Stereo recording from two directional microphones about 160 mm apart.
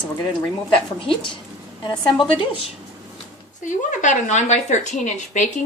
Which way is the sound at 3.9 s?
50° left (ahead or behind).